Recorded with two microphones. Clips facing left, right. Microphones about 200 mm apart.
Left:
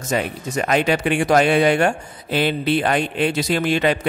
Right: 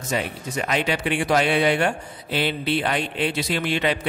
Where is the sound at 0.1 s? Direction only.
45° left (ahead or behind).